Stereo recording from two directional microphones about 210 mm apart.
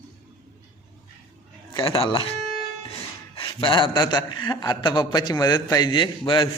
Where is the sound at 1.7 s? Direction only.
25° left (ahead or behind).